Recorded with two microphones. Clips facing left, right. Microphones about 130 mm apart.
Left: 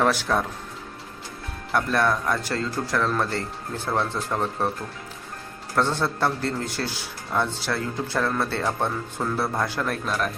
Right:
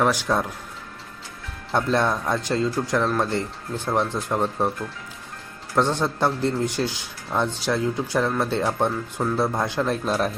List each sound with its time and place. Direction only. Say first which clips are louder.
0.0 s speech: right 1 dB; 15° right (ahead or behind)
1.7 s speech: right 1 dB; 20° right (ahead or behind)
5.7 s speech: right 2 dB; 15° right (ahead or behind)